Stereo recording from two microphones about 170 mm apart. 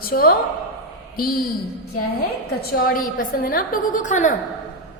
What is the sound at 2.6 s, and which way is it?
A woman's voice, 60° left (ahead or behind).